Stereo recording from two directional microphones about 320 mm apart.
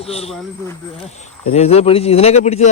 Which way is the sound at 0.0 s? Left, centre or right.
Centre.